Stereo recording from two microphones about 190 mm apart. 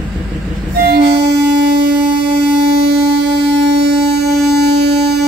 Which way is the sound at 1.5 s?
65° right (ahead or behind).